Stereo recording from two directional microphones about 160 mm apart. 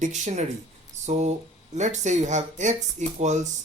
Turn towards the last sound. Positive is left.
turn(degrees=-45)  # may be behind; listen again after turning